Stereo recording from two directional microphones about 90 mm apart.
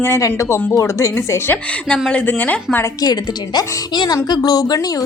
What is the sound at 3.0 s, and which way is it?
Speech, 45° left (ahead or behind).